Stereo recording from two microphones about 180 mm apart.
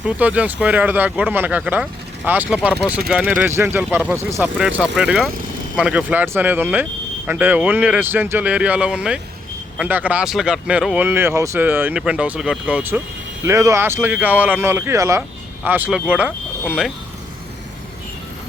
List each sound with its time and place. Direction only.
0.0 s speech: 5° right (ahead or behind)